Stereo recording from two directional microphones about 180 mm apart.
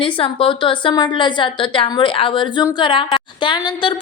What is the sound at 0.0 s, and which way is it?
A woman's voice, 30° left (ahead or behind).